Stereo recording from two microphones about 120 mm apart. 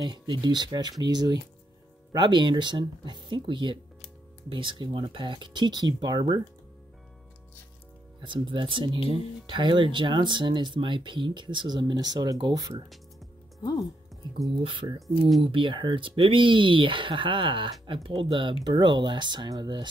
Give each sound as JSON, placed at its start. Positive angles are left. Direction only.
{"t": 0.0, "sound": "speech", "side_deg": -40}
{"t": 8.2, "sound": "speech", "side_deg": -45}
{"t": 14.2, "sound": "speech", "side_deg": -40}